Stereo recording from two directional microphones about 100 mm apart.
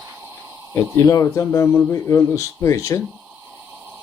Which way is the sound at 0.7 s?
35° left (ahead or behind).